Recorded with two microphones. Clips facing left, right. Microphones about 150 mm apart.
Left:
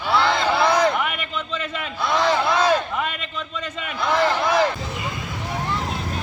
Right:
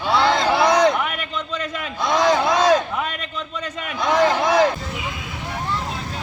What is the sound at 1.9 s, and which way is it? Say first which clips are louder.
Speech: right 3 dB; 15° right (ahead or behind).